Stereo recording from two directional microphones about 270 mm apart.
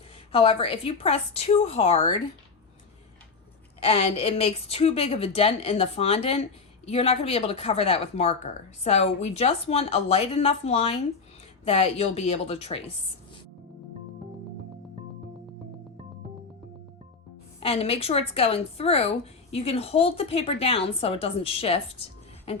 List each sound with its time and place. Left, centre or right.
0.3 s a woman's voice: left
3.8 s a woman's voice: left
17.6 s a woman's voice: left
22.5 s a sound: left